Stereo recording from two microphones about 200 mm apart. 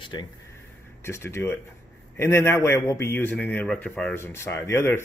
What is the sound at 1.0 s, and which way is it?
A man's voice, 15° left (ahead or behind).